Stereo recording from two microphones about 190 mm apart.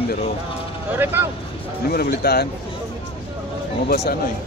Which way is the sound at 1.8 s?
55° left (ahead or behind).